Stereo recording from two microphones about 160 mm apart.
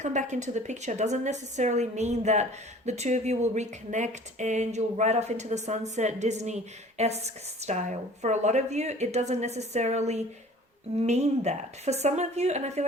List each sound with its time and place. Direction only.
0.0 s a woman's voice: 50° right (ahead or behind)